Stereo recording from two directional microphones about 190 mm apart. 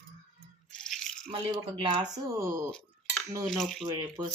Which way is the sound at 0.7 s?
5° left (ahead or behind).